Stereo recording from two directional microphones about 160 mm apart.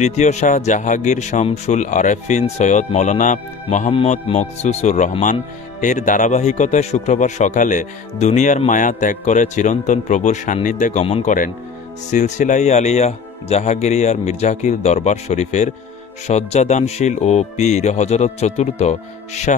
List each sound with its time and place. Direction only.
0.0 s speech: 45° left (ahead or behind)
3.9 s speech: 40° left (ahead or behind)